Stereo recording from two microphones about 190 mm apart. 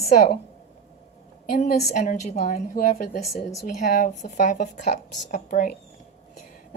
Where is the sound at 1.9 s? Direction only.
35° left (ahead or behind).